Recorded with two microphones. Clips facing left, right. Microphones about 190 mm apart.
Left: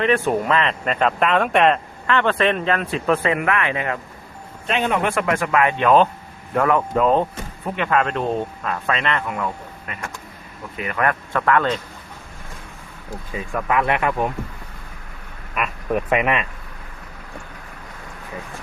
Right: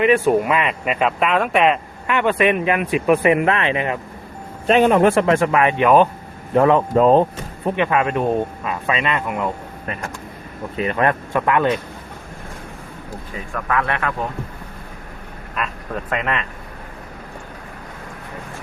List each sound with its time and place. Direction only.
0.0 s speech: 10° right (ahead or behind)
4.6 s speech: 40° right (ahead or behind)
7.8 s speech: 15° right (ahead or behind)
9.8 s speech: 35° right (ahead or behind)
10.8 s speech: 25° right (ahead or behind)
13.7 s speech: 15° left (ahead or behind)
15.5 s speech: 10° left (ahead or behind)